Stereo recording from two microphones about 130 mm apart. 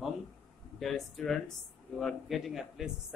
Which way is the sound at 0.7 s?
Centre (ahead or behind).